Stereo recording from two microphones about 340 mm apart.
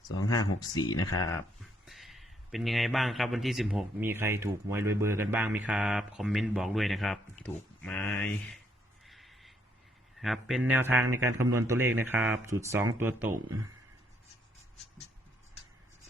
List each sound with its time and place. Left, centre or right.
0.3 s speech: left
0.7 s speech: centre
1.8 s a man's voice: centre
9.0 s a sound: centre
10.2 s a man's voice: centre